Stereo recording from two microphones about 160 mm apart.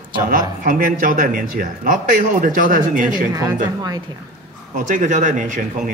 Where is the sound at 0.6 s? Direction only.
60° right (ahead or behind).